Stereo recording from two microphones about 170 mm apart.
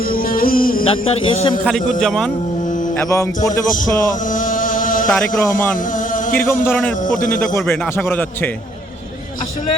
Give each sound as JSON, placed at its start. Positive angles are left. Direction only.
{"t": 0.0, "sound": "music", "side_deg": 60}
{"t": 0.9, "sound": "speech", "side_deg": 35}
{"t": 2.0, "sound": "a man's voice", "side_deg": 5}
{"t": 2.9, "sound": "a man's voice", "side_deg": 15}
{"t": 3.8, "sound": "a sound", "side_deg": 50}
{"t": 5.1, "sound": "a man's voice", "side_deg": 10}
{"t": 5.7, "sound": "a sound", "side_deg": 50}
{"t": 6.3, "sound": "a man's voice", "side_deg": 15}